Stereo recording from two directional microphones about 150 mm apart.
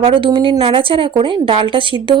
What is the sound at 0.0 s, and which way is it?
A woman's voice, 35° right (ahead or behind).